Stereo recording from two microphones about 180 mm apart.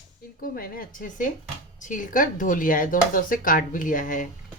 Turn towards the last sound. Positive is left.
turn(degrees=45)  # may be behind; listen again after turning